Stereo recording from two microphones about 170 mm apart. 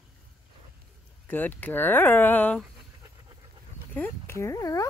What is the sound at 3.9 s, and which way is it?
Speech, 10° left (ahead or behind).